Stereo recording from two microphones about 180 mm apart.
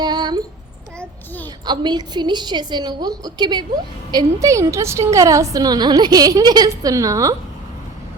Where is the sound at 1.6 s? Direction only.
25° right (ahead or behind).